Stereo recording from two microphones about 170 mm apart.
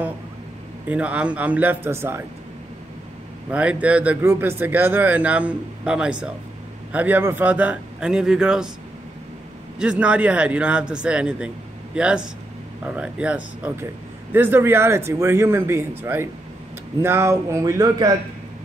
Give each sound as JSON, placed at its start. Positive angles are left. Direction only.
{"t": 0.8, "sound": "speech", "side_deg": -10}
{"t": 3.4, "sound": "speech", "side_deg": -10}
{"t": 9.8, "sound": "speech", "side_deg": -5}